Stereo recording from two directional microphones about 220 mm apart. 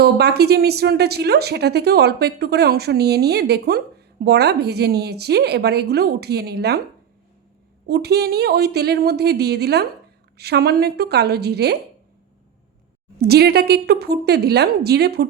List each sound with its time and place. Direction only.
0.0 s speech: 45° right (ahead or behind)
7.9 s speech: 45° right (ahead or behind)
13.1 s speech: 45° right (ahead or behind)